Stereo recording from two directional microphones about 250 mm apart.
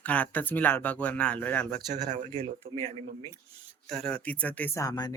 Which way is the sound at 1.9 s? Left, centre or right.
Right.